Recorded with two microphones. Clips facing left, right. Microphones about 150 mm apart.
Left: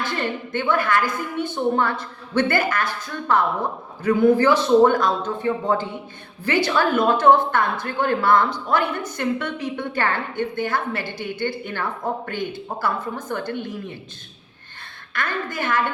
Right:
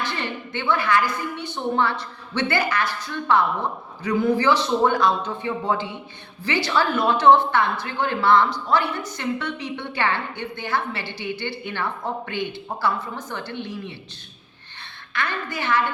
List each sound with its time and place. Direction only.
0.0 s a woman's voice: 50° left (ahead or behind)
15.1 s a woman's voice: 50° left (ahead or behind)